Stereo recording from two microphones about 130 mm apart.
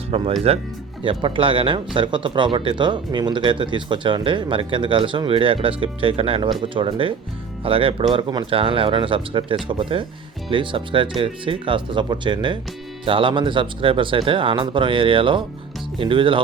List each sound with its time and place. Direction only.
0.1 s speech: 45° right (ahead or behind)